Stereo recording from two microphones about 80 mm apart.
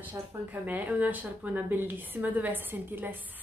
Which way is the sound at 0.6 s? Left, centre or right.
Right.